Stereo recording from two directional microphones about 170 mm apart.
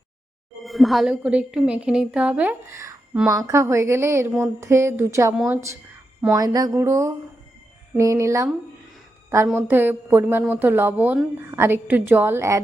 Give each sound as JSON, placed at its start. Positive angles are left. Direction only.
{"t": 0.6, "sound": "a woman's voice", "side_deg": 0}
{"t": 6.3, "sound": "a sound", "side_deg": -20}
{"t": 7.9, "sound": "a woman's voice", "side_deg": -15}
{"t": 9.6, "sound": "a woman's voice", "side_deg": -10}